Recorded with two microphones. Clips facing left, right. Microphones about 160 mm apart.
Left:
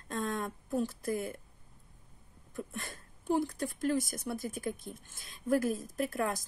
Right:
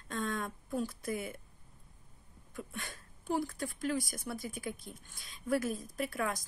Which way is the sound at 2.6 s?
Centre (ahead or behind).